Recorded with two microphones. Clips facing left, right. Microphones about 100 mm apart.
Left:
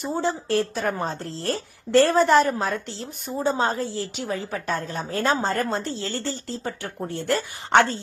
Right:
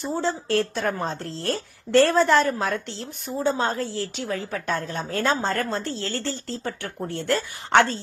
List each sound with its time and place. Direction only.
0.0 s a woman's voice: 15° left (ahead or behind)
0.4 s a woman's voice: centre (ahead or behind)
7.3 s a woman's voice: 15° left (ahead or behind)